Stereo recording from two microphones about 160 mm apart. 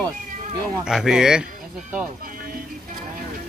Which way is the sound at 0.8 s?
5° right (ahead or behind).